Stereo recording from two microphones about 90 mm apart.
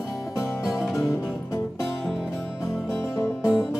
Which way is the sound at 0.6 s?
5° right (ahead or behind).